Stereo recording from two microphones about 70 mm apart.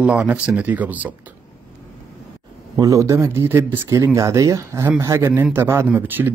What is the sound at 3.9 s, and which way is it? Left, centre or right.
Speech, right.